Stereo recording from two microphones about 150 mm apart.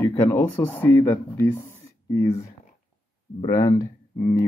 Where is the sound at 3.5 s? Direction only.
25° left (ahead or behind).